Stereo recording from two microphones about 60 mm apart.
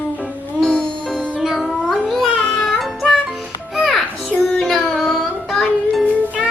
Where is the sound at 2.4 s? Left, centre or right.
Centre.